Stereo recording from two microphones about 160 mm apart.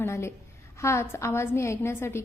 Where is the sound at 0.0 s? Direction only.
15° left (ahead or behind).